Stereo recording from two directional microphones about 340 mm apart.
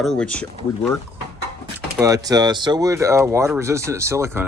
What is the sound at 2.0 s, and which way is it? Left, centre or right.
Speech, centre.